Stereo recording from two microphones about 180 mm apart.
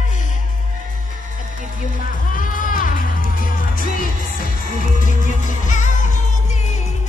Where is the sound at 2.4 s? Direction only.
50° left (ahead or behind).